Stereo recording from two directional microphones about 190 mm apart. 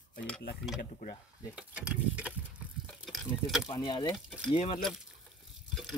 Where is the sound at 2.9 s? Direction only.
Centre (ahead or behind).